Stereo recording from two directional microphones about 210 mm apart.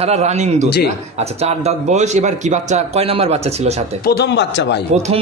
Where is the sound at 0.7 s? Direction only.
50° left (ahead or behind).